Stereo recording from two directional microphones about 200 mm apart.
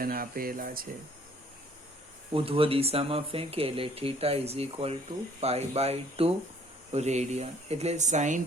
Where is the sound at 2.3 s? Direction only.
30° right (ahead or behind).